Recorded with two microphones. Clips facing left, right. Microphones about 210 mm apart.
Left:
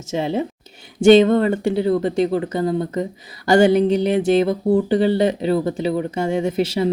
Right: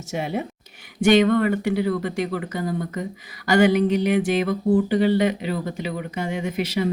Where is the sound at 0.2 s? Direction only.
25° left (ahead or behind).